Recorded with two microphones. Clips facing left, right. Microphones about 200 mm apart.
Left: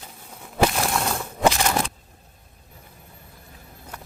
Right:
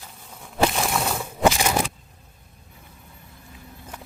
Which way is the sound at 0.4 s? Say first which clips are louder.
Left 1 dB; centre (ahead or behind).